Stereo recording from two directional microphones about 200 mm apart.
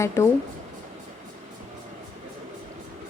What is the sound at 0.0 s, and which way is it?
Speech, 15° left (ahead or behind).